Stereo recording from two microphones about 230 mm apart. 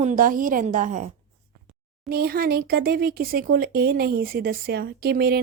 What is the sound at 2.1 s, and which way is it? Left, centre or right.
Speech, right.